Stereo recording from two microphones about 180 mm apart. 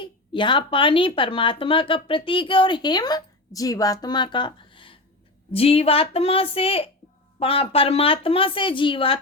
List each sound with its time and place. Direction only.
0.0 s a woman's voice: 25° left (ahead or behind)